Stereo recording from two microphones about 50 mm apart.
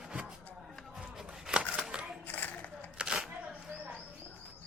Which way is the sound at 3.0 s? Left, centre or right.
Centre.